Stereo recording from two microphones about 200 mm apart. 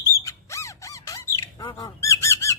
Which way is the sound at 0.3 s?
15° left (ahead or behind).